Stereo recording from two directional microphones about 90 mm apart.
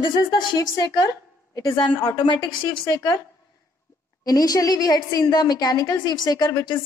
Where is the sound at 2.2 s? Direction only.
70° left (ahead or behind).